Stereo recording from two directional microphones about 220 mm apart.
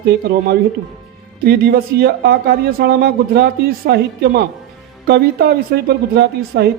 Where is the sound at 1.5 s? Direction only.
45° right (ahead or behind).